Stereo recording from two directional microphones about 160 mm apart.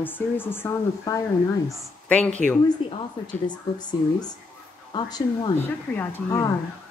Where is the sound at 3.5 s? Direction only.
25° left (ahead or behind).